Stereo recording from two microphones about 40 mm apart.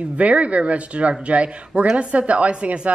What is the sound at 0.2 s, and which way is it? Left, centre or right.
Speech, right.